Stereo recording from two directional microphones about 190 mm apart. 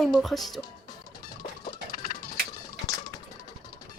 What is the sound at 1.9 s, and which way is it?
Music, 45° left (ahead or behind).